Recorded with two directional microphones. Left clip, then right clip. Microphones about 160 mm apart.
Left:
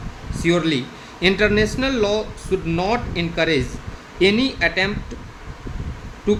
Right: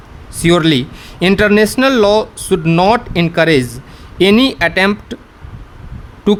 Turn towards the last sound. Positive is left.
turn(degrees=-90)